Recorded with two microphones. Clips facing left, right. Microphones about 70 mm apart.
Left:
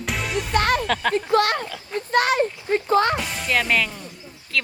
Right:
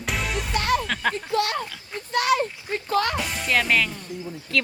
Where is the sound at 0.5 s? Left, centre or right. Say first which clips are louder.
Left 3 dB; left.